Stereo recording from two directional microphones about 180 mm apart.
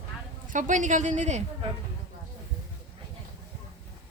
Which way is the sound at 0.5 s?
45° right (ahead or behind).